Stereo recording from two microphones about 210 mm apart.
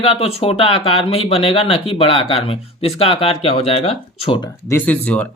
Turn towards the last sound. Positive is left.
turn(degrees=5)  # may be behind; listen again after turning